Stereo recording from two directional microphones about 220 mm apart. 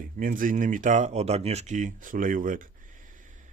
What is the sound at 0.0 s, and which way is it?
Speech, 35° right (ahead or behind).